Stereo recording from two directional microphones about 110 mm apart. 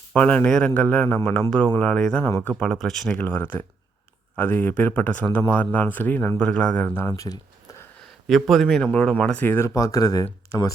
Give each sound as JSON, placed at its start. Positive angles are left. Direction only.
{"t": 0.1, "sound": "speech", "side_deg": 10}
{"t": 3.2, "sound": "speech", "side_deg": 20}
{"t": 8.4, "sound": "speech", "side_deg": 0}
{"t": 8.9, "sound": "speech", "side_deg": 10}
{"t": 9.6, "sound": "speech", "side_deg": 30}